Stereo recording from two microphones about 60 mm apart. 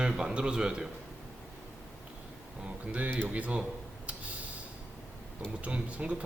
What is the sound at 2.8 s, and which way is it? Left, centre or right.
Speech, right.